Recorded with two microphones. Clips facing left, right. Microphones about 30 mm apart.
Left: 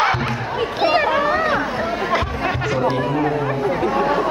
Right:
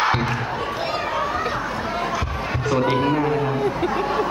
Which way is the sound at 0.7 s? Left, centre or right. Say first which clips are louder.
Left 13 dB; left.